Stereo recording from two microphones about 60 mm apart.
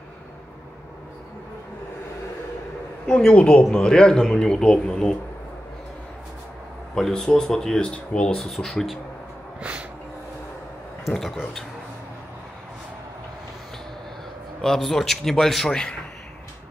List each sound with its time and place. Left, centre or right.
3.3 s speech: centre
7.0 s a man's voice: centre
8.4 s a man's voice: centre
9.6 s snort: centre
11.1 s a man's voice: centre
14.6 s a man's voice: centre